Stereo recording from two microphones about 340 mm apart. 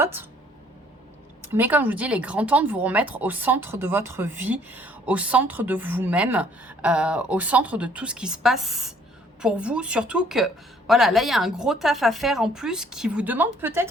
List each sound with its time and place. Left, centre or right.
0.0 s speech: centre
1.5 s speech: centre